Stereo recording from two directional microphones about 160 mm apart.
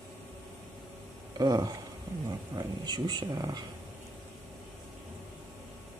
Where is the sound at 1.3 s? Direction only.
25° right (ahead or behind).